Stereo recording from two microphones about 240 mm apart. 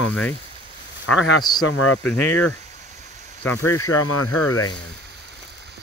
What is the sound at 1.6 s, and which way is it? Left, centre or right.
Speech, left.